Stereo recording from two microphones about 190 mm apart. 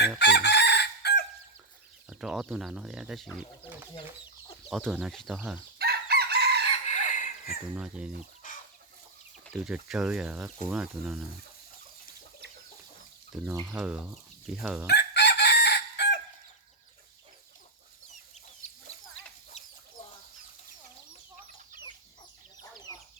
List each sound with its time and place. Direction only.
0.2 s chicken: 60° left (ahead or behind)
2.0 s speech: 5° right (ahead or behind)
4.7 s speech: centre (ahead or behind)
5.8 s chicken: 55° right (ahead or behind)
6.8 s a sound: 40° left (ahead or behind)
7.7 s speech: 5° right (ahead or behind)
8.4 s chicken: 45° left (ahead or behind)
9.5 s speech: 5° right (ahead or behind)
13.4 s speech: 15° right (ahead or behind)
13.7 s speech: 5° right (ahead or behind)
14.8 s chicken: 60° left (ahead or behind)
19.5 s chicken: 35° left (ahead or behind)
22.7 s chicken: 20° left (ahead or behind)